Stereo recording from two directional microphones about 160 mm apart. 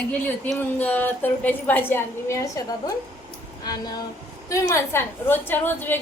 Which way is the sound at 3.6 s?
25° left (ahead or behind).